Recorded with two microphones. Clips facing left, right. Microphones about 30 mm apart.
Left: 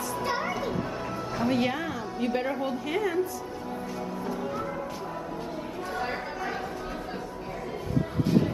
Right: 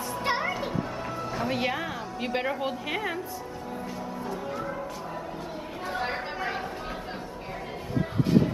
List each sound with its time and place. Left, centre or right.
1.4 s speech: centre
2.1 s a woman's voice: right
5.9 s chatter: right